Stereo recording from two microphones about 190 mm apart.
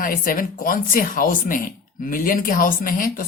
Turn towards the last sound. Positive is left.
turn(degrees=50)  # may be behind; listen again after turning